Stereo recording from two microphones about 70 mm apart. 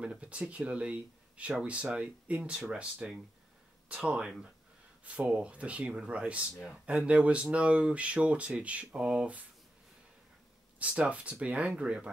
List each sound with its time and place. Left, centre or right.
0.0 s speech: centre
10.8 s speech: centre